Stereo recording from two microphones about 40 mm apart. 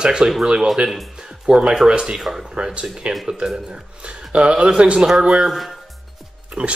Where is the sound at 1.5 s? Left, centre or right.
Centre.